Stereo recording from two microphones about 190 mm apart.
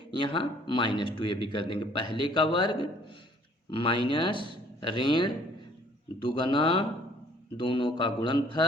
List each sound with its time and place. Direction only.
0.1 s speech: 25° left (ahead or behind)